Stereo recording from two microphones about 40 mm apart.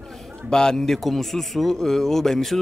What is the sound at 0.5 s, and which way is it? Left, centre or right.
A man's voice, centre.